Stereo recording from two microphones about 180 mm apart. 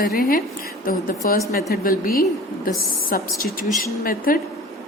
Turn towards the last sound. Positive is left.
turn(degrees=50)  # may be behind; listen again after turning